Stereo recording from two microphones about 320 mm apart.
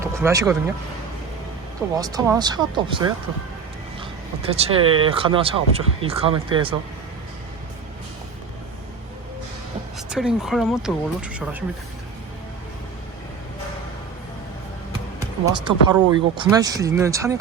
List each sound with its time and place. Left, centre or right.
0.0 s vehicle: centre
2.0 s speech: centre
4.4 s speech: centre
10.1 s speech: centre
15.2 s speech: centre